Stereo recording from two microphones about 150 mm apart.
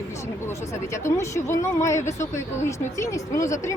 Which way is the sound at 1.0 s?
20° left (ahead or behind).